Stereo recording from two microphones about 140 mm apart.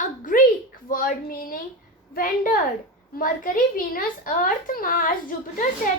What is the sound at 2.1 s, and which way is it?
A woman's voice, 85° left.